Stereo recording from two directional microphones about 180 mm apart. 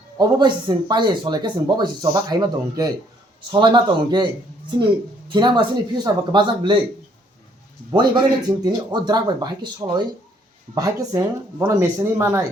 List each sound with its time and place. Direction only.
0.2 s speech: 25° right (ahead or behind)
5.3 s speech: 25° right (ahead or behind)
7.9 s speech: 25° right (ahead or behind)